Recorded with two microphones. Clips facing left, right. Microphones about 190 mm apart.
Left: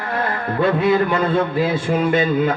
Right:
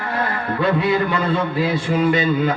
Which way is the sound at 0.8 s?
45° left (ahead or behind).